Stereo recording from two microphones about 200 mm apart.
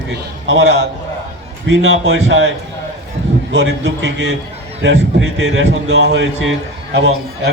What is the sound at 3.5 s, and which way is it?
Speech, 60° right (ahead or behind).